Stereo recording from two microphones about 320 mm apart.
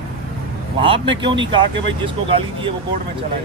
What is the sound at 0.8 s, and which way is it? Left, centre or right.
Speech, centre.